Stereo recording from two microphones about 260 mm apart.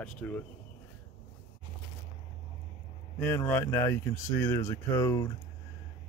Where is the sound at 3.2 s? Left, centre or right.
Centre.